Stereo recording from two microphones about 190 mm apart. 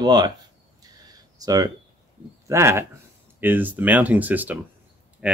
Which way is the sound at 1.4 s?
20° right (ahead or behind).